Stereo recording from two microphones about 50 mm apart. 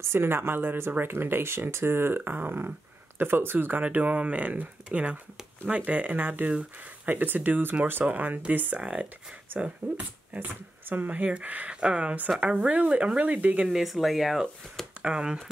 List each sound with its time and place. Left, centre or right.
0.0 s speech: right
10.4 s speech: right
11.1 s speech: right
13.2 s speech: right
13.7 s speech: centre
15.0 s speech: centre